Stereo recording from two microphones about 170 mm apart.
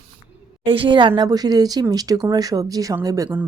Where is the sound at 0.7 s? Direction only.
30° right (ahead or behind).